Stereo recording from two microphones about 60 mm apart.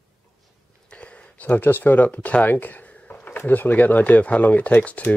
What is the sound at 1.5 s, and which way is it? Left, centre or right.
Speech, left.